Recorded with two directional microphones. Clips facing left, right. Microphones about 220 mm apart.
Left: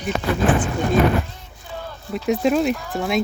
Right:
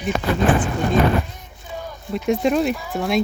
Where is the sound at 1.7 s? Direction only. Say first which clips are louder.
Right 1 dB; 15° right (ahead or behind).